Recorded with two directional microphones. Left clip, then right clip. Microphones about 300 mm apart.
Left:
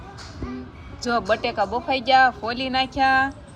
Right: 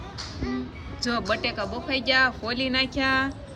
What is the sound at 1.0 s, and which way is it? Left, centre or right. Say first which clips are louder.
Speech: left 4 dB; centre.